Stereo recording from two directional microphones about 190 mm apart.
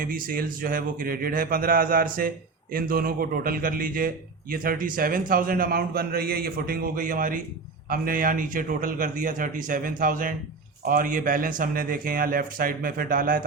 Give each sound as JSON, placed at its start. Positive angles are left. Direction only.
{"t": 0.0, "sound": "a man's voice", "side_deg": -50}